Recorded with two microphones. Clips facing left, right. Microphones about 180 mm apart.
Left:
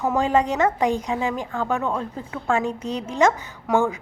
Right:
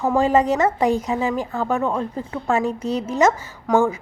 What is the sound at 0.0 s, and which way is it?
A woman's voice, centre (ahead or behind).